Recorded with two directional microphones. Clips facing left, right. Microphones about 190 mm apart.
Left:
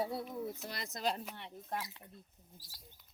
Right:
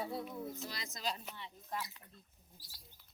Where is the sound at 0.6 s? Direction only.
60° left (ahead or behind).